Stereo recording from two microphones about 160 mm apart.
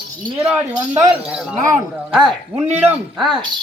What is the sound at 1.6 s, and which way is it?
Speech, 20° right (ahead or behind).